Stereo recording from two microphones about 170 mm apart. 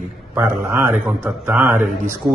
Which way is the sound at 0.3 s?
15° right (ahead or behind).